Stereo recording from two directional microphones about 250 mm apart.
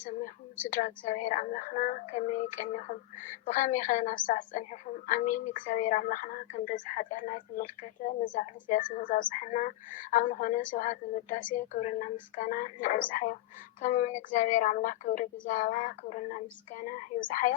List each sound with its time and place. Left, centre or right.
0.0 s a woman's voice: left